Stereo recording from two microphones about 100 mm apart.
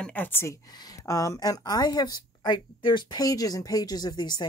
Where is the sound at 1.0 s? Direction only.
35° left (ahead or behind).